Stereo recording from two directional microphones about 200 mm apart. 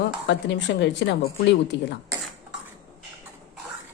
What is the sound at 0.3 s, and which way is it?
Speech, 60° left (ahead or behind).